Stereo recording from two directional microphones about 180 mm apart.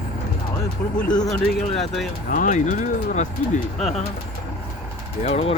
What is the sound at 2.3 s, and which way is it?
Speech, 45° left (ahead or behind).